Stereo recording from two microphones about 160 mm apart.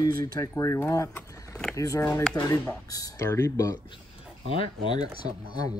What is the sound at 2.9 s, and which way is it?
Speech, 20° left (ahead or behind).